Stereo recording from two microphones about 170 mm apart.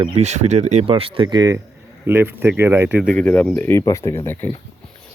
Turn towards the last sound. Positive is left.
turn(degrees=15)  # may be behind; listen again after turning